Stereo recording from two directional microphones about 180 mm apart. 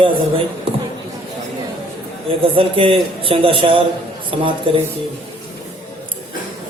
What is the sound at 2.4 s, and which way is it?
Mantra, 30° right (ahead or behind).